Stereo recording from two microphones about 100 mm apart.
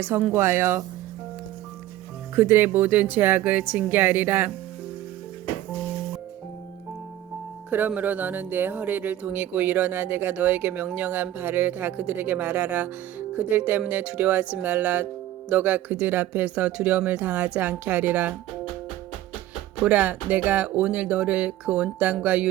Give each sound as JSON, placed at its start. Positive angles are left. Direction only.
{"t": 0.3, "sound": "speech", "side_deg": -25}
{"t": 2.3, "sound": "speech", "side_deg": -20}
{"t": 7.7, "sound": "speech", "side_deg": -20}
{"t": 19.8, "sound": "speech", "side_deg": -15}